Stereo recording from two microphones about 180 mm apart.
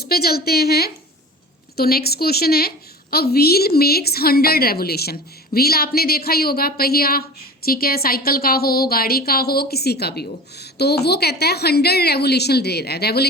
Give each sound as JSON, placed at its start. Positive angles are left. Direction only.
{"t": 0.0, "sound": "speech", "side_deg": 60}